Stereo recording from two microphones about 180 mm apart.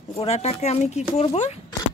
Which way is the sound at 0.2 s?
35° left (ahead or behind).